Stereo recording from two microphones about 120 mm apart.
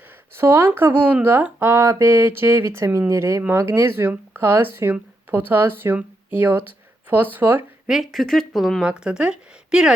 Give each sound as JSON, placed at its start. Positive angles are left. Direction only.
{"t": 0.3, "sound": "speech", "side_deg": -20}
{"t": 7.9, "sound": "speech", "side_deg": 0}